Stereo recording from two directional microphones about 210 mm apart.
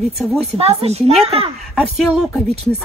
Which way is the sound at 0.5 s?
30° right (ahead or behind).